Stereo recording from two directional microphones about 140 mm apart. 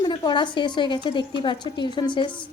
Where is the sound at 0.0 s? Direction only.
35° left (ahead or behind).